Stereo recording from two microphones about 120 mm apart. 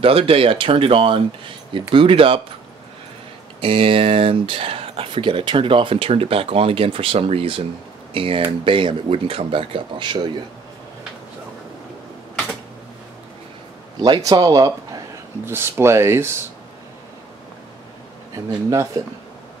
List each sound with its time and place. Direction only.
0.0 s speech: 50° right (ahead or behind)
3.6 s speech: 50° right (ahead or behind)
14.0 s speech: 35° right (ahead or behind)
15.4 s speech: 20° right (ahead or behind)
18.3 s speech: 30° right (ahead or behind)